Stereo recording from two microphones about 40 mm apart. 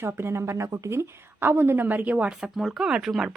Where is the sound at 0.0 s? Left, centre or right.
Right.